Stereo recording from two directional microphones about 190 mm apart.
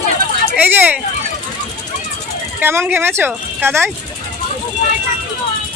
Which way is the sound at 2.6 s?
10° right (ahead or behind).